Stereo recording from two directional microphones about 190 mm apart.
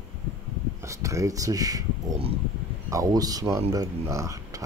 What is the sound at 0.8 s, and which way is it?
Speech, 15° right (ahead or behind).